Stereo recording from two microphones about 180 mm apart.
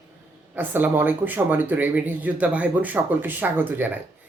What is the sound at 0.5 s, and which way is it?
Speech, 10° right (ahead or behind).